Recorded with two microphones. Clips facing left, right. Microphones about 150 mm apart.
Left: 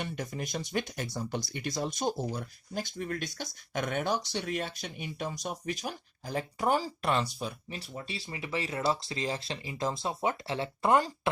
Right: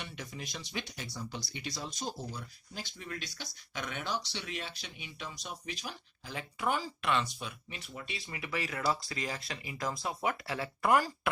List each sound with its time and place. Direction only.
0.0 s speech: 50° left (ahead or behind); by 11.3 s 25° left (ahead or behind)